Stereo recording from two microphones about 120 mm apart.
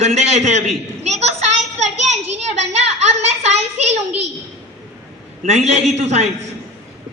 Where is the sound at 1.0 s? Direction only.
65° right (ahead or behind).